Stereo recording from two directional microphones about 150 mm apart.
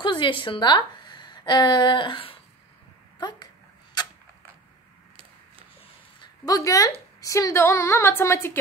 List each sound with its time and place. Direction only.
0.0 s a woman's voice: 30° left (ahead or behind)
4.0 s a sound: 30° left (ahead or behind)
6.4 s a woman's voice: 25° left (ahead or behind)